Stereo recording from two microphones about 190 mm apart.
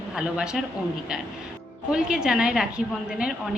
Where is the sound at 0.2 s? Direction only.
5° right (ahead or behind).